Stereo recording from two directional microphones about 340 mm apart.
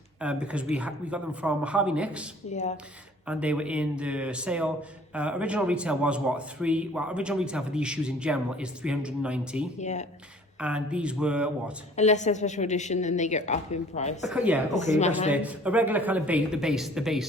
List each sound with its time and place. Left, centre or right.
0.2 s speech: centre
2.5 s a woman's voice: left
3.2 s speech: centre
9.8 s a woman's voice: centre
10.6 s speech: centre
11.9 s a woman's voice: centre
14.2 s speech: centre
14.8 s a woman's voice: centre
15.3 s speech: centre